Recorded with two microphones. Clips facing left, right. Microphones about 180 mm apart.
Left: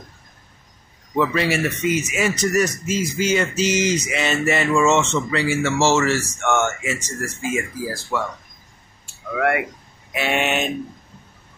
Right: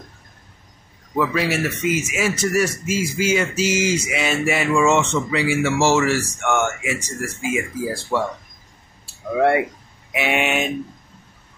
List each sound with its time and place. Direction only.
1.1 s speech: 5° right (ahead or behind)
7.7 s speech: 25° right (ahead or behind)
9.3 s speech: 25° right (ahead or behind)
10.1 s speech: 10° right (ahead or behind)